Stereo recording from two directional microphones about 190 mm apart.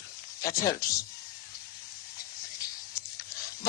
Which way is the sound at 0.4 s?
20° left (ahead or behind).